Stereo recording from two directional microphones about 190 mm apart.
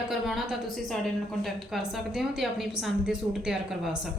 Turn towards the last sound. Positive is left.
turn(degrees=0)  # may be behind; listen again after turning